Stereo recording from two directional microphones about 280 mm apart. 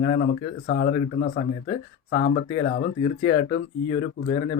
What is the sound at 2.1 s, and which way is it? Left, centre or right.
Speech, left.